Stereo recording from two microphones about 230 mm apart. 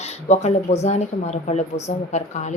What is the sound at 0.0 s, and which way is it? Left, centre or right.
Speech, left.